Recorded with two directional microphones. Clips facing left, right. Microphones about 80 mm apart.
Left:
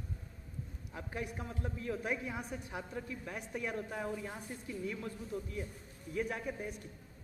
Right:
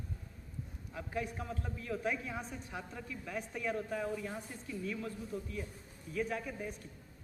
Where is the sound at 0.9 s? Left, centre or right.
Centre.